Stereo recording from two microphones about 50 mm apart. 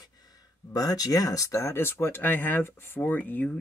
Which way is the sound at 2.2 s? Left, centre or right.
Left.